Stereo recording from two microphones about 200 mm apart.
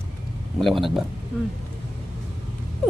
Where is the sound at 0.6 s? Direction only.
Centre (ahead or behind).